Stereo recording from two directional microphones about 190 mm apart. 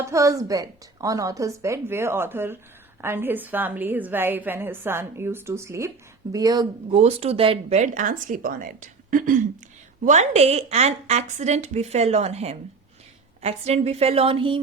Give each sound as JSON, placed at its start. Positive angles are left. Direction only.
{"t": 0.0, "sound": "a woman's voice", "side_deg": -15}